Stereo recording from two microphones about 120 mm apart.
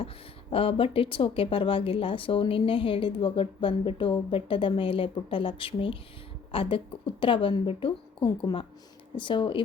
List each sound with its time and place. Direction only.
0.5 s speech: 50° left (ahead or behind)